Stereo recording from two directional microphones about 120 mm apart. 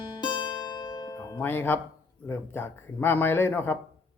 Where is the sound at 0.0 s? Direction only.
40° left (ahead or behind).